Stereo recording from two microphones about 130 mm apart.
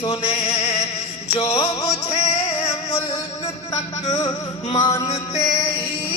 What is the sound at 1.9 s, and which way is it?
Music, 50° left (ahead or behind).